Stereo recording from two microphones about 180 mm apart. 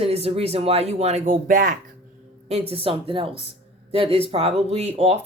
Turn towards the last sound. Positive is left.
turn(degrees=-35)  # may be behind; listen again after turning